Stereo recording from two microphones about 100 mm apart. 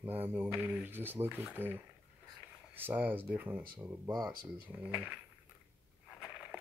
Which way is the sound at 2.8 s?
20° right (ahead or behind).